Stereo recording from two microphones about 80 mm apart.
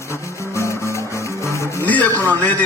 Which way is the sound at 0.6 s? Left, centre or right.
Left.